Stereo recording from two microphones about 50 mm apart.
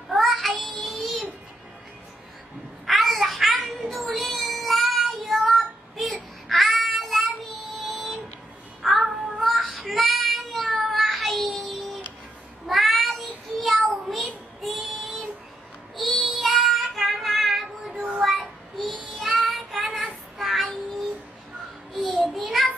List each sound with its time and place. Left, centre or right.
0.1 s child singing: centre
3.0 s child singing: centre
13.8 s a sound: centre
14.6 s child singing: centre
19.9 s child singing: right
20.3 s child singing: centre
22.1 s a sound: centre